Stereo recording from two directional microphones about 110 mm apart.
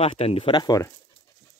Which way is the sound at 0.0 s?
65° left (ahead or behind).